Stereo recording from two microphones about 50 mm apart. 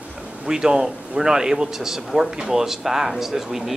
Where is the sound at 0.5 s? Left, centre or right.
Centre.